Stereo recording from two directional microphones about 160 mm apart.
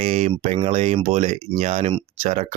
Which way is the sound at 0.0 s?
45° right (ahead or behind).